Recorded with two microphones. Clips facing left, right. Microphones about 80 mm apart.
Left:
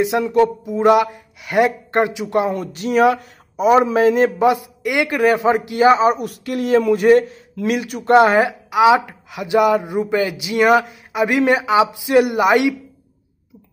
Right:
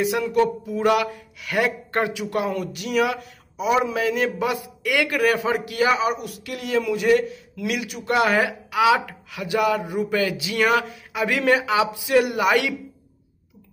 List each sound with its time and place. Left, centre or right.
0.0 s a man's voice: left
6.2 s a man's voice: left